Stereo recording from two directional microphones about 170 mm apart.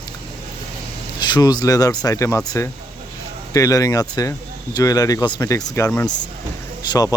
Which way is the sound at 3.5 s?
20° left (ahead or behind).